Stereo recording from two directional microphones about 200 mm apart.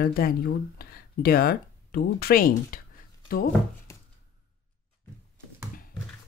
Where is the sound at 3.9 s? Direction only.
15° left (ahead or behind).